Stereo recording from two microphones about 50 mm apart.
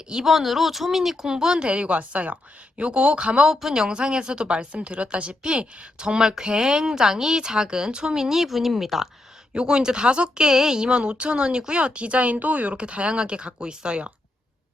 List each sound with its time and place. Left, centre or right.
0.1 s a woman's voice: centre
3.5 s a woman's voice: centre
9.5 s a woman's voice: centre